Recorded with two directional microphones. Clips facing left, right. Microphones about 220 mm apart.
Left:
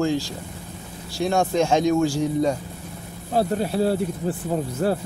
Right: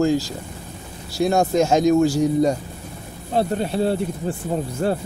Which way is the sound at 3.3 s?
5° left (ahead or behind).